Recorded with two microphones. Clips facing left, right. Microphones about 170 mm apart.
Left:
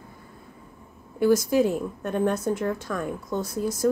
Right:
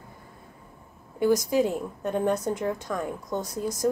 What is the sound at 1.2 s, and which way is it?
A woman's voice, 15° right (ahead or behind).